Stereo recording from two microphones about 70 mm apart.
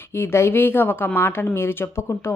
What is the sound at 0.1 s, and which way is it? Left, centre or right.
A woman's voice, left.